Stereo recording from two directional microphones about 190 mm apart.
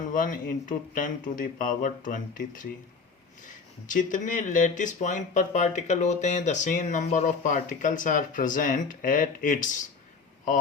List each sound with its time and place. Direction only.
0.1 s speech: 45° left (ahead or behind)